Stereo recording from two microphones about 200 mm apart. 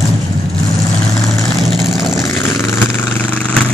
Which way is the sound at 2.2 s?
10° left (ahead or behind).